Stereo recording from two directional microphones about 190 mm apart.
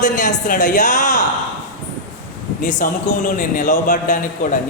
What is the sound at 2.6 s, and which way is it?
A woman's voice, 40° left (ahead or behind).